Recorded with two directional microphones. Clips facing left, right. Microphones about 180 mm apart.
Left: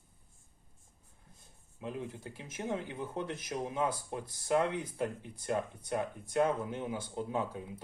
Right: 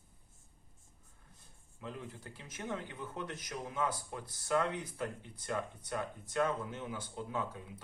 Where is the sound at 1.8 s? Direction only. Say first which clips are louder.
Left 5 dB; 20° left (ahead or behind).